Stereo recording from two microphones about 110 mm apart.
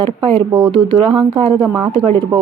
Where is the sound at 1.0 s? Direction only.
50° right (ahead or behind).